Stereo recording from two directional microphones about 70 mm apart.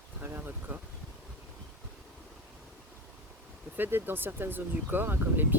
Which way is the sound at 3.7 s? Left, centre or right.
Right.